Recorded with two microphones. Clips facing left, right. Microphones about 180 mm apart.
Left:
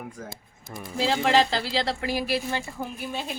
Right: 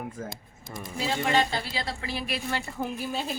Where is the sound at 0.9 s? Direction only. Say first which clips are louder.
Left 4 dB; 90° left.